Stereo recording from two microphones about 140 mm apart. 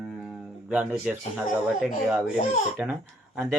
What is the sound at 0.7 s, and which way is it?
Speech, 10° right (ahead or behind).